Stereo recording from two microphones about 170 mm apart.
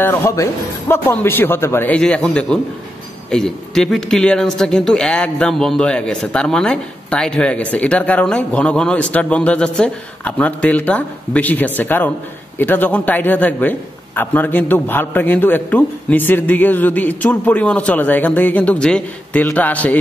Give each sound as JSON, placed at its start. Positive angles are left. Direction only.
{"t": 0.0, "sound": "a man's voice", "side_deg": 15}